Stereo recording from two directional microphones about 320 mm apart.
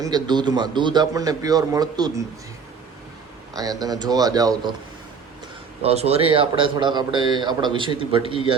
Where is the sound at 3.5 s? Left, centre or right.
Centre.